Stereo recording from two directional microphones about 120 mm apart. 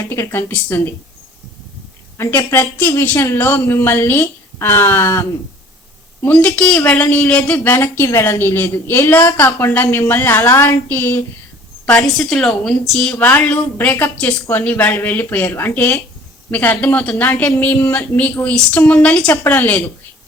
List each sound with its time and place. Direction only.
0.1 s a woman's voice: 20° left (ahead or behind)
2.1 s a man's voice: 20° left (ahead or behind)
6.2 s a woman's voice: 10° left (ahead or behind)
11.9 s a woman's voice: 5° left (ahead or behind)